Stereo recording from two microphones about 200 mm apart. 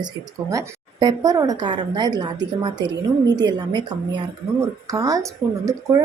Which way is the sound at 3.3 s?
20° right (ahead or behind).